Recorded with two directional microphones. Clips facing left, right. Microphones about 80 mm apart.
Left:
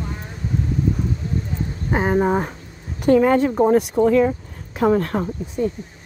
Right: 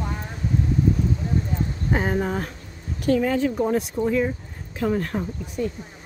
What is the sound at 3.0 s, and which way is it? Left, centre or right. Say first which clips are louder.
Speech: left 6 dB; left.